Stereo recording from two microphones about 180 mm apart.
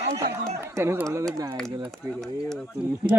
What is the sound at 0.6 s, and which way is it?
Speech, 15° right (ahead or behind).